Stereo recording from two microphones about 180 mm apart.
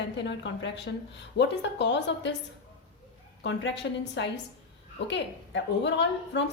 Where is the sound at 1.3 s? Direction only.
70° left (ahead or behind).